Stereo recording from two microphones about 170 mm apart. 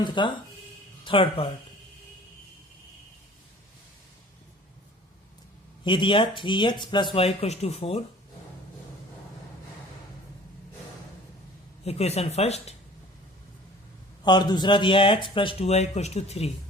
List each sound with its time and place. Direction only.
0.0 s speech: 25° left (ahead or behind)
5.8 s speech: 30° left (ahead or behind)
11.9 s speech: 40° left (ahead or behind)
14.3 s speech: 25° left (ahead or behind)